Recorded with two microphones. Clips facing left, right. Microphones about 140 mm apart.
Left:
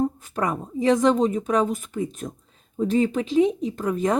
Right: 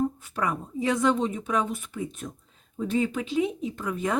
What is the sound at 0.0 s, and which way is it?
Speech, 40° left (ahead or behind).